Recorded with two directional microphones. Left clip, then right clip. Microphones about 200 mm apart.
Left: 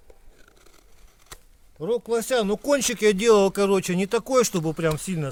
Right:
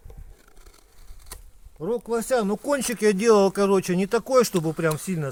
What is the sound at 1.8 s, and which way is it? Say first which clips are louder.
Speech: left 2 dB; 15° left (ahead or behind).